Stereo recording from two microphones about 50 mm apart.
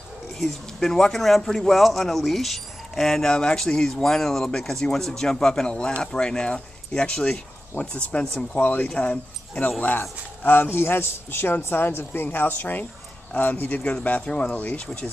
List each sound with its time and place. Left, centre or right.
0.4 s speech: centre; by 9.8 s left
9.8 s speech: left